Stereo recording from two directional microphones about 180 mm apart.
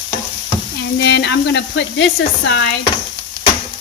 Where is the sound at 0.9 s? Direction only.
70° left (ahead or behind).